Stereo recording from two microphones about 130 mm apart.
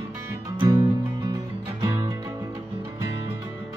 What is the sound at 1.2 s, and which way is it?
Music, 25° right (ahead or behind).